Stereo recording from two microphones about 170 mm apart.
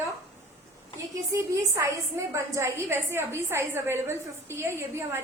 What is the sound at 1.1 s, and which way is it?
A woman's voice, 20° right (ahead or behind).